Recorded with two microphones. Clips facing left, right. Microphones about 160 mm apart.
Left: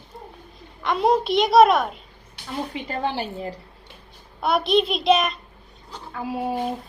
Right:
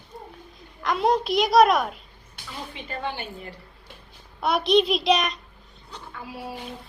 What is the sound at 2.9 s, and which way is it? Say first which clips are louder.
Speech: left 4 dB; 35° left (ahead or behind).